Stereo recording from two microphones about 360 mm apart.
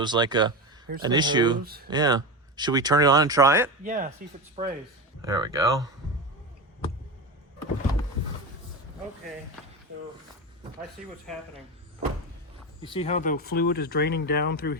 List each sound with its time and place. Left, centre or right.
0.0 s speech: centre
1.6 s speech: right
1.9 s speech: centre
3.8 s speech: right
12.8 s speech: centre